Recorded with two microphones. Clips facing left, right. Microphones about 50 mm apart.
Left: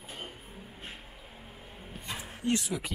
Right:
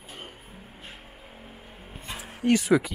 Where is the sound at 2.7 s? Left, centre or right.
Right.